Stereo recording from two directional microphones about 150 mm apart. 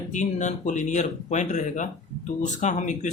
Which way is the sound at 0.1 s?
55° left (ahead or behind).